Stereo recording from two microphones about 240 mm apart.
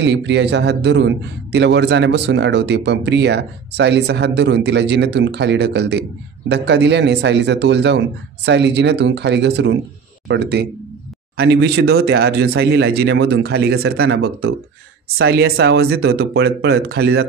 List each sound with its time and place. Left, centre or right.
0.0 s a man's voice: right